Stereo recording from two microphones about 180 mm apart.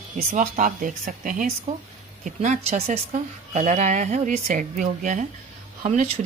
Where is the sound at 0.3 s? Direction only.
45° right (ahead or behind).